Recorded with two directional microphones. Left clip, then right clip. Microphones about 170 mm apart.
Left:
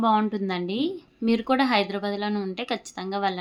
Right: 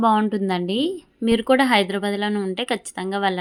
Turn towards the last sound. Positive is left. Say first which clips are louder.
# right 4 dB
turn(degrees=-30)  # may be behind; listen again after turning